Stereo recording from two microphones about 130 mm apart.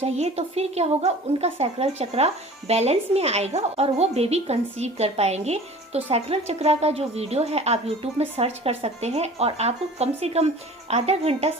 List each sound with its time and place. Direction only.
0.0 s a woman's voice: 55° right (ahead or behind)